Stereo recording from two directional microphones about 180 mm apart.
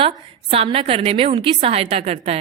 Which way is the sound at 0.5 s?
30° right (ahead or behind).